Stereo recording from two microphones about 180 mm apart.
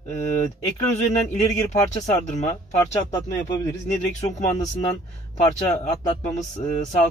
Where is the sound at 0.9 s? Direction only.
40° left (ahead or behind).